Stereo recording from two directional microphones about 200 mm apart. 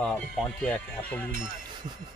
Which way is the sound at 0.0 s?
5° left (ahead or behind).